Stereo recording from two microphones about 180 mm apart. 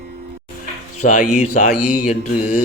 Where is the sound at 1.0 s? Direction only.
45° left (ahead or behind).